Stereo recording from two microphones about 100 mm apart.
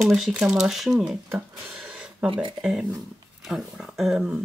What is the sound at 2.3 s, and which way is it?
Speech, 55° right (ahead or behind).